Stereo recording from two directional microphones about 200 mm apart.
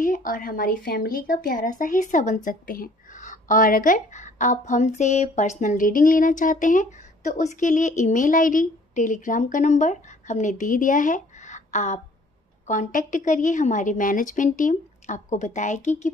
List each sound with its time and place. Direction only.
0.0 s speech: 45° left (ahead or behind)